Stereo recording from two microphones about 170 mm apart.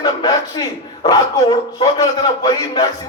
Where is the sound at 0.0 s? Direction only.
25° left (ahead or behind).